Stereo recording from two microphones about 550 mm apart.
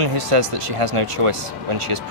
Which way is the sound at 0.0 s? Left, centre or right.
Right.